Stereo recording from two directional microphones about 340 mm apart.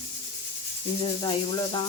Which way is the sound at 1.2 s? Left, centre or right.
Centre.